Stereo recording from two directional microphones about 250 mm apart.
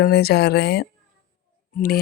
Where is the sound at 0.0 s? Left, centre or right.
Left.